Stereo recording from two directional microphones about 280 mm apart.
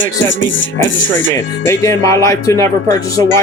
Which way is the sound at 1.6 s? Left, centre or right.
Centre.